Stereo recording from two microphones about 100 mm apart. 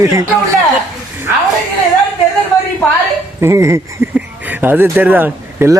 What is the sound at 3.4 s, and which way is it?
Speech, 30° right (ahead or behind).